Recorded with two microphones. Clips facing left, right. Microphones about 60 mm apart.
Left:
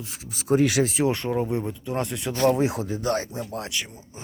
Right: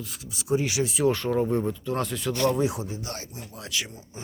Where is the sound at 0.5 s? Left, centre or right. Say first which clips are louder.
Left 5 dB; left.